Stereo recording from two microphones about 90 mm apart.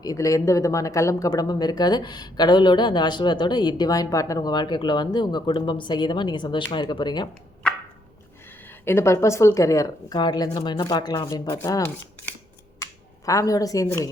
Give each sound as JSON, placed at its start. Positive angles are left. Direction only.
{"t": 0.0, "sound": "speech", "side_deg": 40}
{"t": 8.6, "sound": "speech", "side_deg": 25}
{"t": 12.8, "sound": "finger snapping", "side_deg": 40}